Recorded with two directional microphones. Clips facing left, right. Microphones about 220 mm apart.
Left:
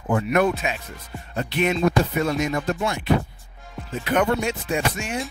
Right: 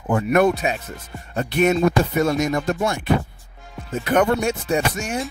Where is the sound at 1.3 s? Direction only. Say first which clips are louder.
Right 5 dB; 45° right (ahead or behind).